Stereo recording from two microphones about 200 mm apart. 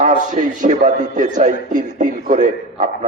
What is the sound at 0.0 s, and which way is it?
A man's voice, 40° right (ahead or behind).